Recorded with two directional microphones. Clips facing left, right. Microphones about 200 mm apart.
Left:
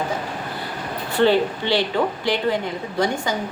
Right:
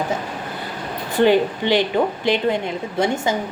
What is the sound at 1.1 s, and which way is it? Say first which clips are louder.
A woman's voice: right 2 dB; 15° right (ahead or behind).